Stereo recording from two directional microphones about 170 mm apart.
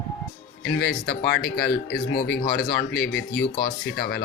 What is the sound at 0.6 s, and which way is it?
Speech, 90° left.